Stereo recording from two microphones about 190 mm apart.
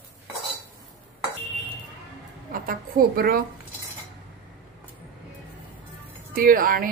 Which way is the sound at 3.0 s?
50° right (ahead or behind).